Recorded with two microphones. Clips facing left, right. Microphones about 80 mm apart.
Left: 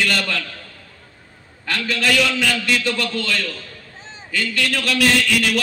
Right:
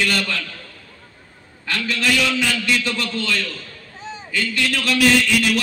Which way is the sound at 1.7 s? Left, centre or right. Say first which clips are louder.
Left 1 dB; left.